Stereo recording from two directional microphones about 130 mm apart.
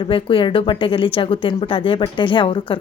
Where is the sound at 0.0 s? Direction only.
40° left (ahead or behind).